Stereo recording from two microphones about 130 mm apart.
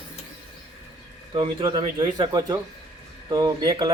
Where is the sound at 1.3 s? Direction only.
40° right (ahead or behind).